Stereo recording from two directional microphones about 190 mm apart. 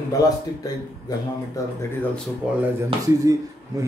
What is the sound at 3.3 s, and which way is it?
Speech, 20° right (ahead or behind).